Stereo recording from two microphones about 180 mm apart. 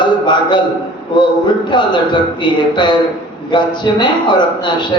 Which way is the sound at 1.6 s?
25° left (ahead or behind).